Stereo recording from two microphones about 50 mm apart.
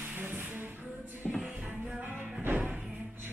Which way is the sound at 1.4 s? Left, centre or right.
Right.